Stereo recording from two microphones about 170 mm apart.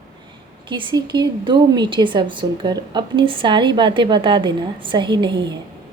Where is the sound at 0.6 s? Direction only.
30° right (ahead or behind).